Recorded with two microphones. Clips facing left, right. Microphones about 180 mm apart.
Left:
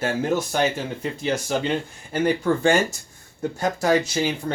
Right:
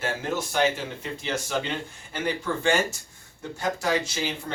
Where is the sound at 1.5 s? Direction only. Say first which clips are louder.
Left 5 dB; 40° left (ahead or behind).